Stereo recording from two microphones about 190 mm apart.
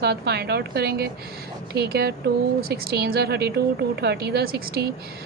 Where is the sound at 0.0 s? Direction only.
55° right (ahead or behind).